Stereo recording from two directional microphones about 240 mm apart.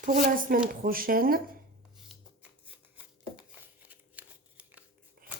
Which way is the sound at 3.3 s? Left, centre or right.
Centre.